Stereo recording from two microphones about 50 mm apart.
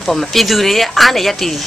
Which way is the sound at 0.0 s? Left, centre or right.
Centre.